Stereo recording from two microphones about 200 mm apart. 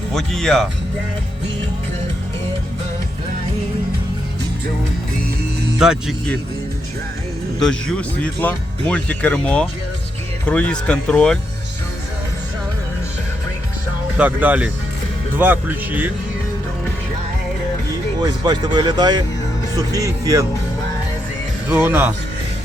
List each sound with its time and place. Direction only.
0.1 s speech: centre (ahead or behind)
5.8 s speech: centre (ahead or behind)
7.6 s speech: 5° left (ahead or behind)
14.2 s speech: 10° right (ahead or behind)
18.2 s speech: 20° right (ahead or behind)
21.7 s speech: 10° right (ahead or behind)